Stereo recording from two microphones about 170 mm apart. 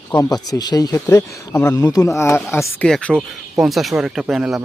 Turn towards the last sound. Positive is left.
turn(degrees=0)  # may be behind; listen again after turning